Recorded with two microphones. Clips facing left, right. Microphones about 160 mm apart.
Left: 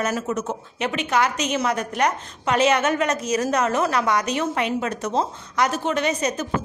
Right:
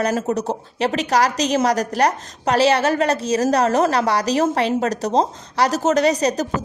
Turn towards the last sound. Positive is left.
turn(degrees=-35)  # may be behind; listen again after turning